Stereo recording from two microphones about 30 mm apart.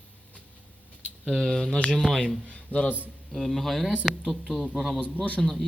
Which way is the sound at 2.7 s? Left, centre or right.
Left.